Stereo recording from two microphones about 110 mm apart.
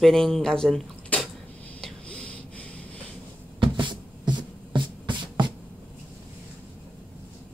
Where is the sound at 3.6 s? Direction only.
45° right (ahead or behind).